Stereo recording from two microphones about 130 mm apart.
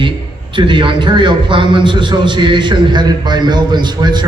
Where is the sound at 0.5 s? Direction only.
40° right (ahead or behind).